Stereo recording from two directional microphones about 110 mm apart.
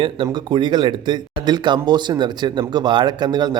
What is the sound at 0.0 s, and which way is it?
A man's voice, 45° right (ahead or behind).